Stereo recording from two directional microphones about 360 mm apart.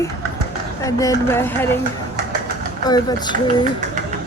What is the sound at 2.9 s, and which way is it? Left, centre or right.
Speech, centre.